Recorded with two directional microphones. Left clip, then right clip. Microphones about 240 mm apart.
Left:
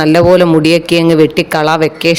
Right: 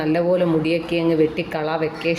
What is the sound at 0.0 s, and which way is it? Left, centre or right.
A man's voice, left.